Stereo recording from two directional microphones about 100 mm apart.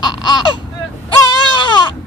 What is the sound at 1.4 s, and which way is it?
Baby cry, 45° left (ahead or behind).